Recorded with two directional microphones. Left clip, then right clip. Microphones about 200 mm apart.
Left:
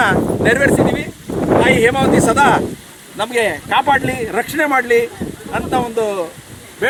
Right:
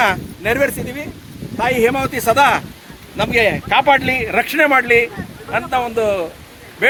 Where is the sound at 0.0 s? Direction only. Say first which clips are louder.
Left 3 dB; 50° right (ahead or behind).